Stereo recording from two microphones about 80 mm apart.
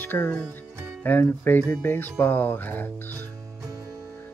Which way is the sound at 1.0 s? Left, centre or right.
Left.